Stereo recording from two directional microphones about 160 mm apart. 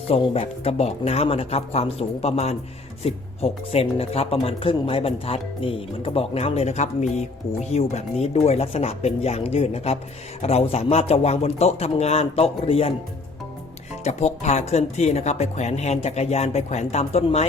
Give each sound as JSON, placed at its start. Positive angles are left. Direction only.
{"t": 0.1, "sound": "speech", "side_deg": 40}
{"t": 14.0, "sound": "speech", "side_deg": 45}